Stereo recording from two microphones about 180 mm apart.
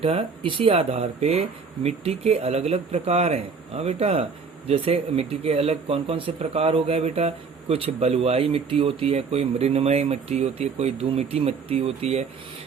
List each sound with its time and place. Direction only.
0.0 s speech: 30° right (ahead or behind)